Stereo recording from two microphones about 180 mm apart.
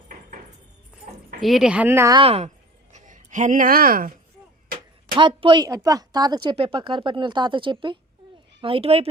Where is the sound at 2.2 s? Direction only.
35° right (ahead or behind); by 4.1 s 50° right (ahead or behind).